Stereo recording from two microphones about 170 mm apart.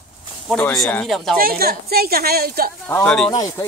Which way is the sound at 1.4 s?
65° right (ahead or behind).